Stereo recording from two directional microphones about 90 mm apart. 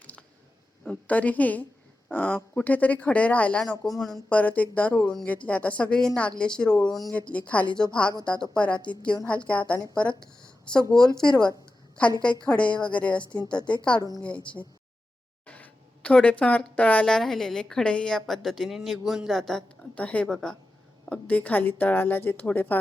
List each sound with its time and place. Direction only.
0.0 s a sound: 15° left (ahead or behind)
0.9 s speech: 15° left (ahead or behind)
3.6 s speech: 5° left (ahead or behind)
4.3 s a woman's voice: 15° left (ahead or behind)
15.4 s a woman's voice: 15° left (ahead or behind)